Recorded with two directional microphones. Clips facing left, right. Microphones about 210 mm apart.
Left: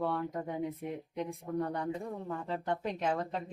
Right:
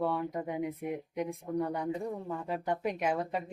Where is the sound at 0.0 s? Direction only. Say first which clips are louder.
Right 2 dB; 15° right (ahead or behind).